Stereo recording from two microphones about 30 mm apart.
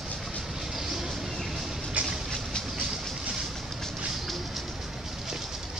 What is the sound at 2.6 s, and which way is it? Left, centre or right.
Train, centre.